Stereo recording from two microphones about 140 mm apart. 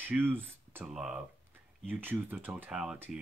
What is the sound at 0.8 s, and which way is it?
Speech, 5° right (ahead or behind).